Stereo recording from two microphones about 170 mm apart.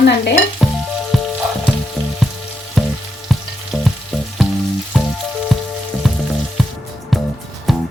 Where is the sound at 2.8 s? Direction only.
Centre (ahead or behind).